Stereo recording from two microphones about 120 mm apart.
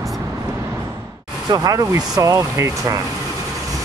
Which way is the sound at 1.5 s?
30° right (ahead or behind).